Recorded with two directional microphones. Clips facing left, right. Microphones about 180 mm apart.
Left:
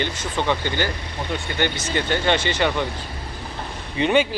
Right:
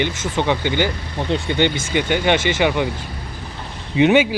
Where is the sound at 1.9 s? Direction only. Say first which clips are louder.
Right 3 dB; 10° right (ahead or behind).